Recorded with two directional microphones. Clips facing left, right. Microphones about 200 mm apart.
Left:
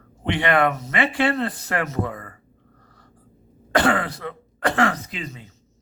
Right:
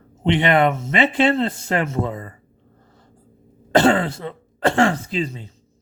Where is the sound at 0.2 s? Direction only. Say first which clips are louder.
Right 3 dB; 20° right (ahead or behind).